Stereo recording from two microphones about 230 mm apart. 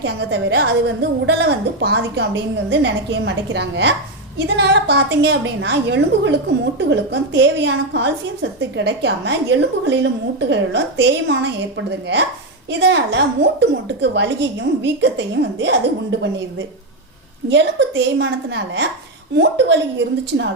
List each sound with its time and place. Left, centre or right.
0.0 s a woman's voice: right
17.5 s a woman's voice: right